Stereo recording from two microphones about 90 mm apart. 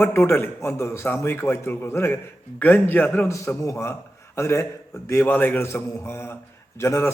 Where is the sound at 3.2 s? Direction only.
30° left (ahead or behind).